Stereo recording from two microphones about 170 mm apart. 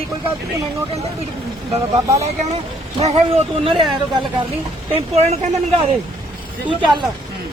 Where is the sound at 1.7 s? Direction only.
40° right (ahead or behind).